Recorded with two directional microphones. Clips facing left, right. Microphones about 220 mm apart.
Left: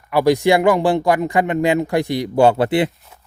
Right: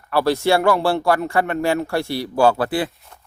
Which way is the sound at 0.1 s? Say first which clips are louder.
Left 3 dB; 15° left (ahead or behind).